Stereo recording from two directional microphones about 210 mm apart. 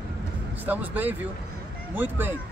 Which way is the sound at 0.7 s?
10° right (ahead or behind).